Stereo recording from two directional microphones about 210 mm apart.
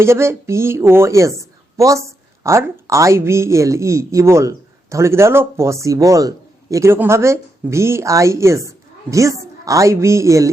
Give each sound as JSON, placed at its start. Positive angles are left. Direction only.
{"t": 0.0, "sound": "a woman's voice", "side_deg": -10}